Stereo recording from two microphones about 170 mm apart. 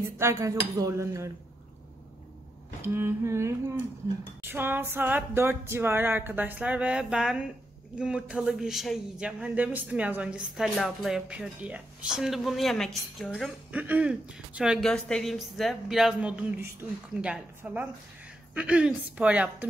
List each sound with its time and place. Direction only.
0.2 s music: 20° right (ahead or behind)
2.8 s music: 15° right (ahead or behind)
8.0 s speech: 5° right (ahead or behind)
17.2 s music: 5° right (ahead or behind)